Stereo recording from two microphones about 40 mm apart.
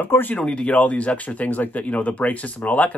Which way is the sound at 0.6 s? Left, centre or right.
Left.